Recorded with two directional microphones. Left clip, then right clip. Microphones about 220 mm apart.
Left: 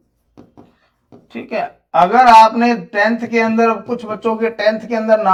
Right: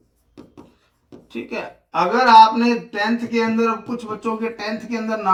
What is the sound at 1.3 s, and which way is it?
Speech, 30° left (ahead or behind).